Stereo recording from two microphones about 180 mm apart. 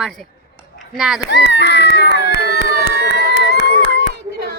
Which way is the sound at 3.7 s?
75° left (ahead or behind).